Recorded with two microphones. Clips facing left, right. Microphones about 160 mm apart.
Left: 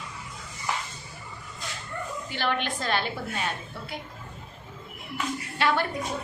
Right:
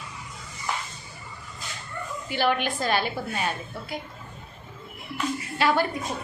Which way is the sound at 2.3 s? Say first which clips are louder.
Right 5 dB; 10° right (ahead or behind).